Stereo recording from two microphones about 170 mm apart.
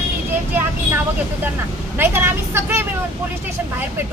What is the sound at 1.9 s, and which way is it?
Speech, 15° right (ahead or behind).